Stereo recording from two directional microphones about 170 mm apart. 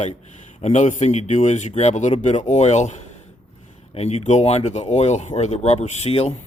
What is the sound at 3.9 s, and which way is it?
Speech, 40° left (ahead or behind).